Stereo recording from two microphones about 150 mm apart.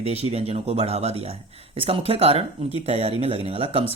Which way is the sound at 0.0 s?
45° right (ahead or behind).